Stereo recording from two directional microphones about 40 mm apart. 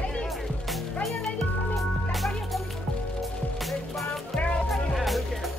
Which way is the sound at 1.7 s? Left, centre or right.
Centre.